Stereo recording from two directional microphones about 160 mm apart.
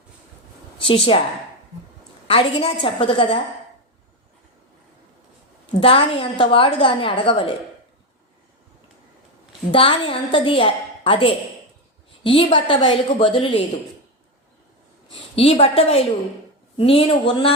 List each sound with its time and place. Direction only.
0.8 s a woman's voice: 35° left (ahead or behind)
2.2 s a woman's voice: 35° left (ahead or behind)
5.8 s a woman's voice: 35° left (ahead or behind)
9.7 s a woman's voice: 35° left (ahead or behind)
15.4 s a woman's voice: 35° left (ahead or behind)